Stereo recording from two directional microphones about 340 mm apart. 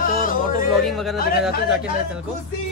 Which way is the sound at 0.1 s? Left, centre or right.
Left.